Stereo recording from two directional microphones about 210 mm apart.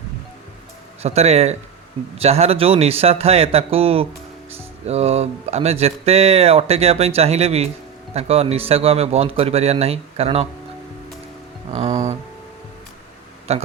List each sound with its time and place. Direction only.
1.0 s speech: 30° right (ahead or behind)
13.5 s speech: 30° right (ahead or behind)